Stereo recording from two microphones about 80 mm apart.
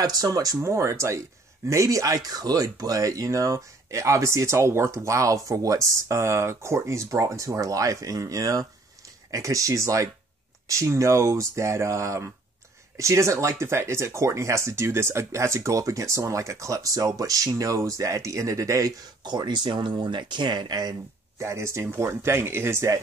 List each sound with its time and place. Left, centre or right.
0.0 s speech: right
19.2 s speech: right
21.4 s speech: right